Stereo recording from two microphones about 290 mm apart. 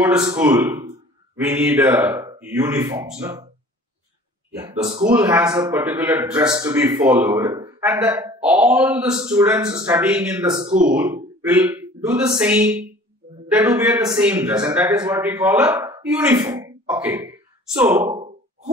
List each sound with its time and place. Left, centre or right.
0.0 s speech: centre
4.6 s a man's voice: centre
16.3 s a sound: centre